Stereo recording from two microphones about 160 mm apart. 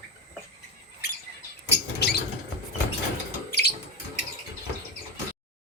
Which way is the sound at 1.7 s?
90° left.